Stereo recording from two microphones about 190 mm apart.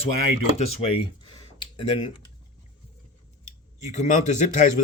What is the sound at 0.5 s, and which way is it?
Speech, 35° left (ahead or behind).